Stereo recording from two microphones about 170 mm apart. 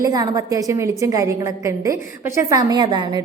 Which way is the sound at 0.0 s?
20° right (ahead or behind).